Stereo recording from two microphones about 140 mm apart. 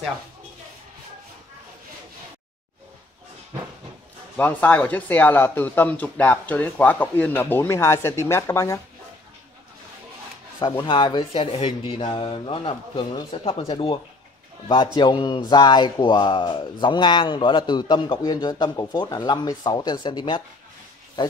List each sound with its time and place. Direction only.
4.4 s speech: 10° left (ahead or behind)
10.6 s speech: 20° left (ahead or behind)
10.9 s speech: 30° left (ahead or behind)
15.0 s speech: 30° left (ahead or behind)